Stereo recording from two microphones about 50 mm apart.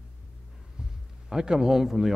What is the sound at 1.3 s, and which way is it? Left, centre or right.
Speech, centre.